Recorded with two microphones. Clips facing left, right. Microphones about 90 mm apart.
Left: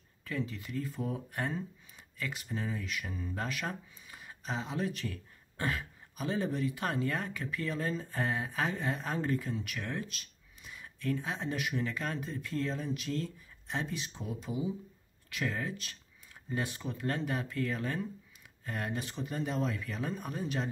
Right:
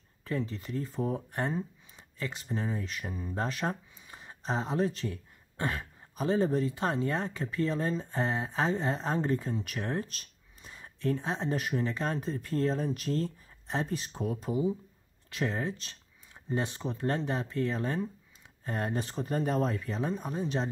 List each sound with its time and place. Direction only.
0.2 s speech: 35° right (ahead or behind)
15.2 s speech: 30° right (ahead or behind)